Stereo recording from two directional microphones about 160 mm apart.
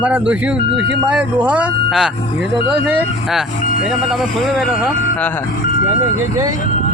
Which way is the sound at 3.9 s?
Centre (ahead or behind).